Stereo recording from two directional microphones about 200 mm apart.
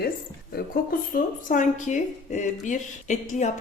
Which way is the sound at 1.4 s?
40° left (ahead or behind).